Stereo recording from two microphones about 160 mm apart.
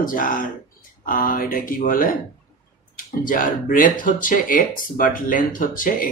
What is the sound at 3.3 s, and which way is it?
Speech, 60° left (ahead or behind).